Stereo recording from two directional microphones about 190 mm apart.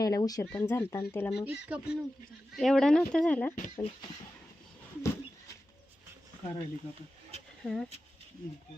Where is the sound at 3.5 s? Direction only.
40° left (ahead or behind).